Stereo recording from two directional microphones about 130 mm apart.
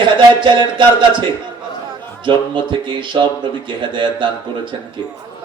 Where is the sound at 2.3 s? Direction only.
35° right (ahead or behind).